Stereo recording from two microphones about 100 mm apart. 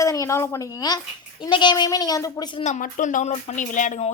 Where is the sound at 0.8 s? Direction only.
40° left (ahead or behind).